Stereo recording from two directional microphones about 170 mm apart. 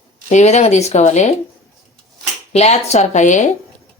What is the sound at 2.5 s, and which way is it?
Speech, 40° left (ahead or behind).